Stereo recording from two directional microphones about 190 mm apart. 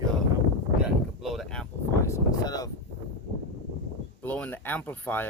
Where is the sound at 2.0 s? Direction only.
15° left (ahead or behind).